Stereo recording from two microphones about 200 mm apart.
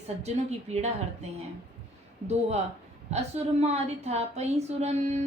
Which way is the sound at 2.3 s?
35° right (ahead or behind).